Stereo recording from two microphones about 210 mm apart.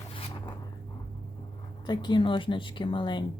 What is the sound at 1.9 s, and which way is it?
A woman's voice, 20° left (ahead or behind).